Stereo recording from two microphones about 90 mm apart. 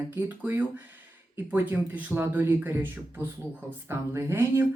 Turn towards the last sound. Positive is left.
turn(degrees=-25)  # may be behind; listen again after turning